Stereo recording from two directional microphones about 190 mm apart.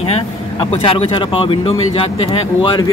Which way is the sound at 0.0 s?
30° left (ahead or behind).